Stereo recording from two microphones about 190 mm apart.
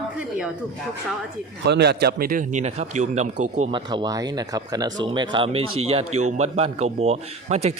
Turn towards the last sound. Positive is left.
turn(degrees=-35)  # may be behind; listen again after turning